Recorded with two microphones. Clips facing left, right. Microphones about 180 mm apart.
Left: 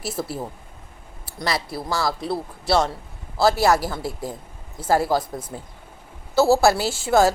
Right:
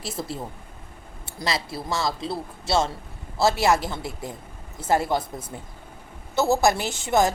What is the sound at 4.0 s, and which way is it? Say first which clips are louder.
Speech: left 4 dB; 25° left (ahead or behind).